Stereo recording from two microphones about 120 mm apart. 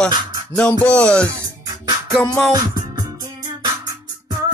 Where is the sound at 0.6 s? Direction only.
10° left (ahead or behind).